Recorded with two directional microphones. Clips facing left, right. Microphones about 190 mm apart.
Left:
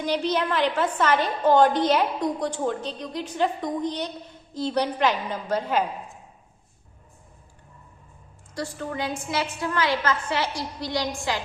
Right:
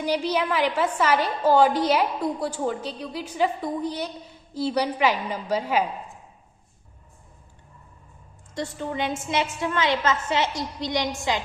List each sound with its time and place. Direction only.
0.0 s a woman's voice: 10° right (ahead or behind)
8.5 s a woman's voice: 20° right (ahead or behind)